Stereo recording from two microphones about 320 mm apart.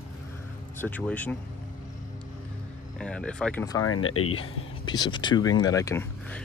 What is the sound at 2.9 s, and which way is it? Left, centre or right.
Speech, centre.